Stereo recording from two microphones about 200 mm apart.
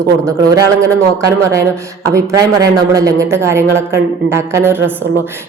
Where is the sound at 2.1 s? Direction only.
15° right (ahead or behind).